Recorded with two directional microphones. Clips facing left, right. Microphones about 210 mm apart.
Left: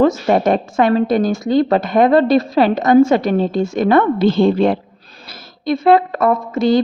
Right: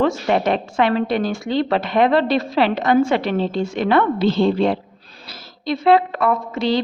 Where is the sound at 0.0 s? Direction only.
45° left (ahead or behind).